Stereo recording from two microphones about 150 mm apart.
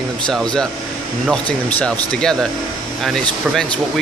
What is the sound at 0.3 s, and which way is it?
Speech, 5° left (ahead or behind).